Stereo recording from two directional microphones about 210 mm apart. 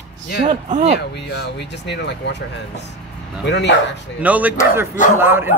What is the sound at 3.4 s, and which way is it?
Speech, 55° left (ahead or behind).